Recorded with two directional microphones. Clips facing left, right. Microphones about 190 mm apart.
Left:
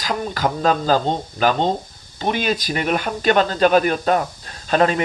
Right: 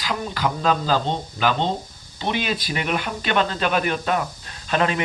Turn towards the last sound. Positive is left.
turn(degrees=40)  # may be behind; listen again after turning